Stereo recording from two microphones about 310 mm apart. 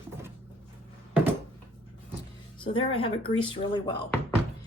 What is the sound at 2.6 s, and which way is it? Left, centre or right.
Speech, centre.